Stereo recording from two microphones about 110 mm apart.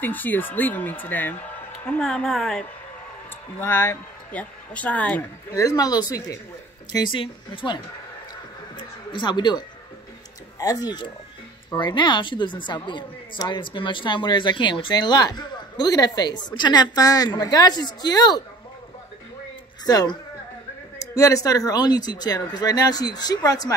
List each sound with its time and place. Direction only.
0.0 s a woman's voice: 15° left (ahead or behind)
3.5 s speech: 20° left (ahead or behind)
5.5 s a woman's voice: 30° left (ahead or behind); by 7.8 s 50° left (ahead or behind)
9.1 s a woman's voice: 45° left (ahead or behind)
19.9 s speech: 35° left (ahead or behind)